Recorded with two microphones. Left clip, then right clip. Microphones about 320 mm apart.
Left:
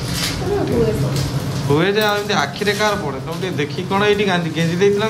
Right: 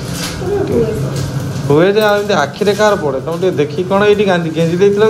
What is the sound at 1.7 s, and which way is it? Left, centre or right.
Speech, centre.